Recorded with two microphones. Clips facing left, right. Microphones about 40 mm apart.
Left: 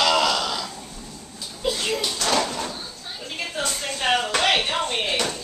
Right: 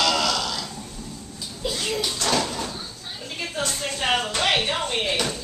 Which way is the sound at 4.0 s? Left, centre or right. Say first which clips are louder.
Left 2 dB; centre.